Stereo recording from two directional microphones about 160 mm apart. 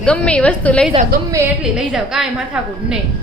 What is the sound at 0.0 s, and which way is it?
Speech, 5° left (ahead or behind).